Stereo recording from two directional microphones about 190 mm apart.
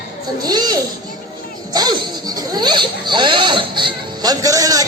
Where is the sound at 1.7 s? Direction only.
20° right (ahead or behind).